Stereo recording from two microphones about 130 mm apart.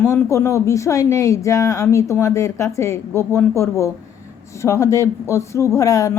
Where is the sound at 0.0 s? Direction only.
20° left (ahead or behind).